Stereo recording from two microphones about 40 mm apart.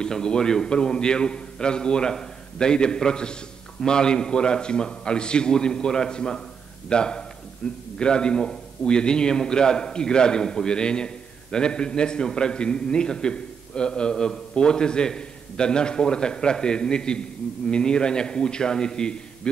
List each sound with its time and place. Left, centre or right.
0.0 s a man's voice: centre